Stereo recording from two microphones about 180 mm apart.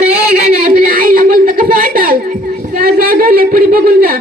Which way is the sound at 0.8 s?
50° right (ahead or behind).